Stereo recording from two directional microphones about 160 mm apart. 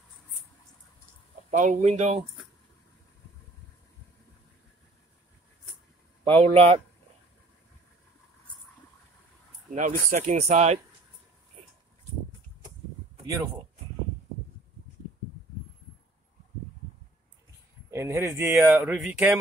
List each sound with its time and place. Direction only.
1.5 s speech: 45° right (ahead or behind)
6.2 s speech: 40° right (ahead or behind)
9.7 s speech: 50° right (ahead or behind)
17.9 s speech: 15° right (ahead or behind)
18.7 s speech: 5° right (ahead or behind)